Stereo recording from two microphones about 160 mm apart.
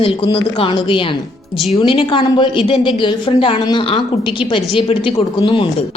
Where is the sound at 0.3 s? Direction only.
35° left (ahead or behind).